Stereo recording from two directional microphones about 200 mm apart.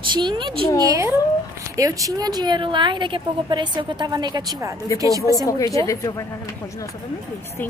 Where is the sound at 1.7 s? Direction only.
15° right (ahead or behind).